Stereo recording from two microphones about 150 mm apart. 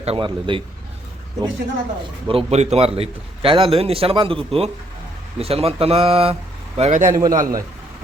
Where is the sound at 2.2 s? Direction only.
40° right (ahead or behind).